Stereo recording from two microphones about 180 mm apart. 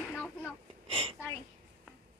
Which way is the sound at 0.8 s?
30° right (ahead or behind).